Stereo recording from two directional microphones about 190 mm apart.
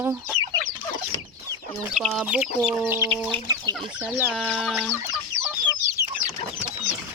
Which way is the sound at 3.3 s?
20° right (ahead or behind).